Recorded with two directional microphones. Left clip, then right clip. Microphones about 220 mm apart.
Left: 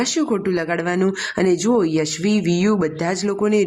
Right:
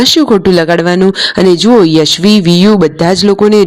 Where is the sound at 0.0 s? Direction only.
35° right (ahead or behind).